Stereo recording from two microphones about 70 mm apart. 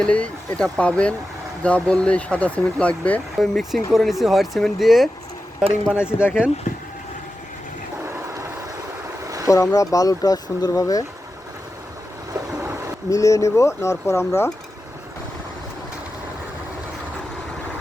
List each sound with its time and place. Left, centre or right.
0.0 s speech: centre
3.3 s speech: centre
5.5 s speech: centre
9.2 s a sound: right
9.5 s speech: left
13.1 s speech: left